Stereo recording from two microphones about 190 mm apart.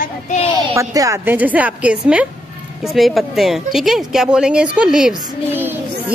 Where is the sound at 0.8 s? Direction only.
15° right (ahead or behind).